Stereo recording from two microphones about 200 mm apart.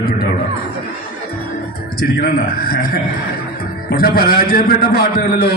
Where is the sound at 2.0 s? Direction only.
50° left (ahead or behind).